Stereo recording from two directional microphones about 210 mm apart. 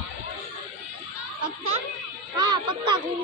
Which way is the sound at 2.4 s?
20° right (ahead or behind).